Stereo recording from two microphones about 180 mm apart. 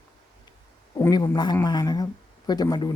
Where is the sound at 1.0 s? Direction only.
20° left (ahead or behind).